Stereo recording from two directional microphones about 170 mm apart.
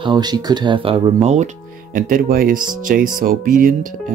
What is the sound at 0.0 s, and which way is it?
Speech, 25° right (ahead or behind).